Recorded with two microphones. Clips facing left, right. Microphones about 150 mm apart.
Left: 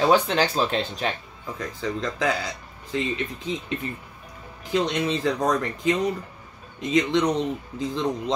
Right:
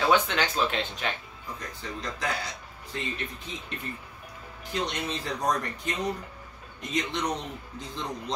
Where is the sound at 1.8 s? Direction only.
90° left.